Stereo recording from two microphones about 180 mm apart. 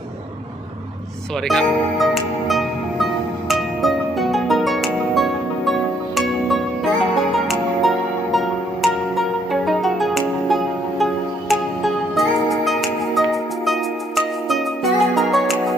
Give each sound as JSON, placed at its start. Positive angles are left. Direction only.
{"t": 1.5, "sound": "speech", "side_deg": 0}
{"t": 2.5, "sound": "music", "side_deg": 0}